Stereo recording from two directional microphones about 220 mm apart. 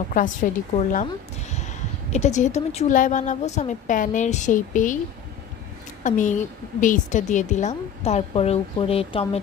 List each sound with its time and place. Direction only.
0.1 s speech: 35° left (ahead or behind)
6.0 s speech: 35° left (ahead or behind)